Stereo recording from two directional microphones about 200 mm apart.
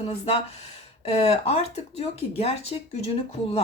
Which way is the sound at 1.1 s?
30° left (ahead or behind).